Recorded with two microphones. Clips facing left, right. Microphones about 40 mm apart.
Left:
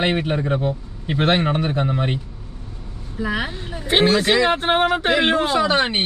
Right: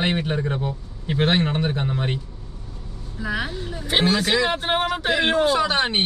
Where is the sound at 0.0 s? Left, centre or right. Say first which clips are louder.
Left 3 dB; centre.